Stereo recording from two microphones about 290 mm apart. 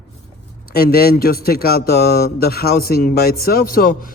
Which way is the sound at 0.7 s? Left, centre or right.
Left.